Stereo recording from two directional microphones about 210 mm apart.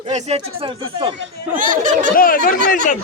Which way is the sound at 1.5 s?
40° right (ahead or behind).